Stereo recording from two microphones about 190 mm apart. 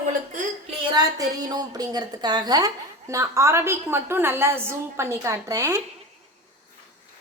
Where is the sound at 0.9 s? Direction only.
20° right (ahead or behind).